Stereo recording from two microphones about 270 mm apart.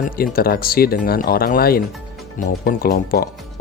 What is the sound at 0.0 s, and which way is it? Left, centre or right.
Speech, left.